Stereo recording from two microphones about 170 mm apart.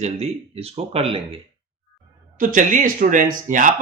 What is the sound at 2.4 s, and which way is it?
A man's voice, 50° right (ahead or behind).